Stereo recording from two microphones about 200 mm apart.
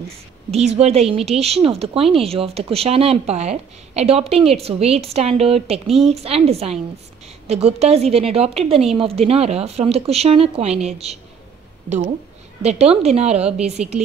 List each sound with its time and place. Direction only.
0.5 s speech: 30° right (ahead or behind)
12.6 s speech: 30° right (ahead or behind)